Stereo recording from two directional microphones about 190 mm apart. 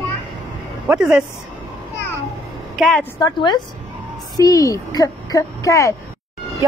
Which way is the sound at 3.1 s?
20° left (ahead or behind).